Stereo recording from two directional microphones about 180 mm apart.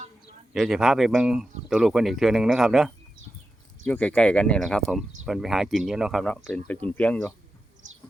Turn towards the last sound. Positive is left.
turn(degrees=10)  # may be behind; listen again after turning